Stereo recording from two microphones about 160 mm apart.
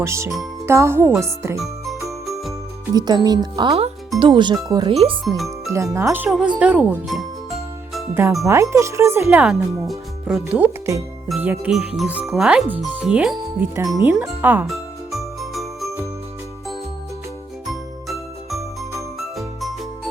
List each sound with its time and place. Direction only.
0.0 s speech: 15° right (ahead or behind)
1.5 s music: centre (ahead or behind)
2.2 s jingle: centre (ahead or behind)
2.9 s speech: 25° right (ahead or behind); by 13.7 s 5° right (ahead or behind)
13.7 s speech: 20° right (ahead or behind)
14.7 s jingle: centre (ahead or behind)
18.1 s music: centre (ahead or behind)